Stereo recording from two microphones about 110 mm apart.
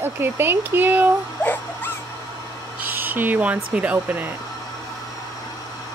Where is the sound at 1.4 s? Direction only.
15° left (ahead or behind).